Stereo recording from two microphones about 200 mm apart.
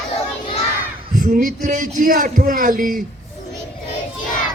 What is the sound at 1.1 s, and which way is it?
A man's voice, 40° right (ahead or behind).